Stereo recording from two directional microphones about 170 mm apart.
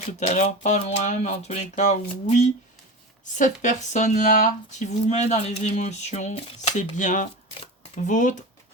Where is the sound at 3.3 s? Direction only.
45° left (ahead or behind).